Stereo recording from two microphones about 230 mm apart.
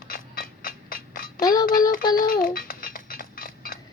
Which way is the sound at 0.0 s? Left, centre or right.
Left.